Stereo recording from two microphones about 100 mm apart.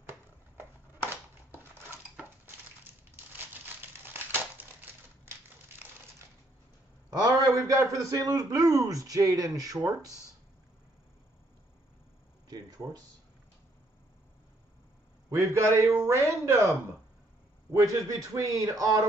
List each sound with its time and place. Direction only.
1.5 s a sound: 20° right (ahead or behind)
3.6 s crushing: 20° right (ahead or behind)
7.1 s a man's voice: 40° right (ahead or behind)
12.4 s a sound: 40° right (ahead or behind)
15.2 s speech: 30° right (ahead or behind)
17.7 s a man's voice: 35° right (ahead or behind)